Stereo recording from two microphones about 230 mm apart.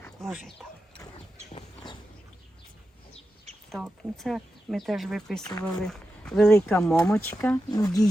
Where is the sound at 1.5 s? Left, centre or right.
Left.